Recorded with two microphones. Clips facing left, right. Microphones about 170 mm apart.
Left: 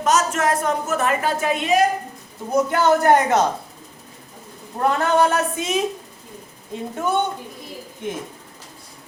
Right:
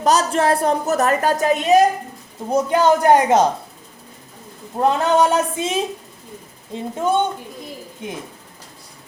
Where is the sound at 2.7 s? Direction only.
15° right (ahead or behind).